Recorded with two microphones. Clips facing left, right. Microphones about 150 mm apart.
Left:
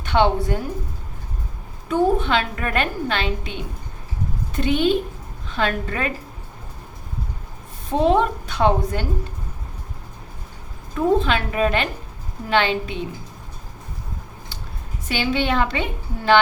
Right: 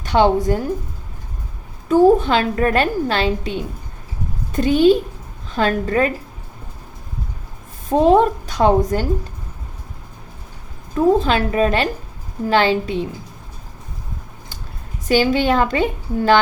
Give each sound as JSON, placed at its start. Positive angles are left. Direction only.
{"t": 0.0, "sound": "a woman's voice", "side_deg": -40}
{"t": 1.9, "sound": "a woman's voice", "side_deg": -40}
{"t": 7.9, "sound": "a woman's voice", "side_deg": -40}
{"t": 11.2, "sound": "a woman's voice", "side_deg": -35}
{"t": 15.0, "sound": "a woman's voice", "side_deg": -40}